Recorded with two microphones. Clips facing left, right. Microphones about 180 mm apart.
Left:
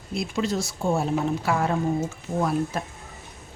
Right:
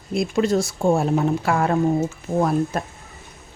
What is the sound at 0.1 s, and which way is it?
Speech, 55° right (ahead or behind).